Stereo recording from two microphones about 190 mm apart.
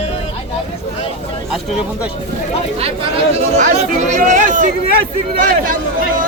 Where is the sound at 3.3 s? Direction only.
40° right (ahead or behind).